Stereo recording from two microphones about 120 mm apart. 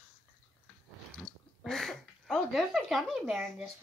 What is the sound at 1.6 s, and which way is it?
A child's voice, centre (ahead or behind).